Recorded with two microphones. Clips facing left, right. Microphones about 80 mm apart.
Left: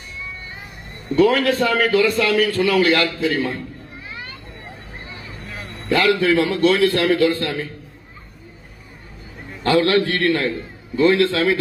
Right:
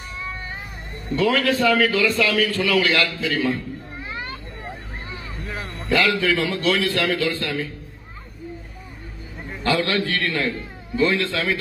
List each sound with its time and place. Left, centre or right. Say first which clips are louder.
1.2 s a man's voice: left 3 dB; left
6.1 s a man's voice: left 4 dB; left
9.6 s a man's voice: left 5 dB; left